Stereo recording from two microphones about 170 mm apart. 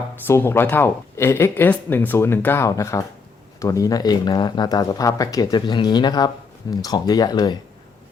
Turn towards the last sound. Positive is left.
turn(degrees=25)  # may be behind; listen again after turning